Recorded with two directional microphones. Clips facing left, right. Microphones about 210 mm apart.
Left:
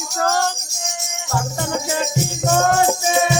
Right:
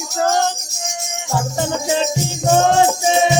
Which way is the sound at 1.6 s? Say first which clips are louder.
Right 5 dB; 25° right (ahead or behind).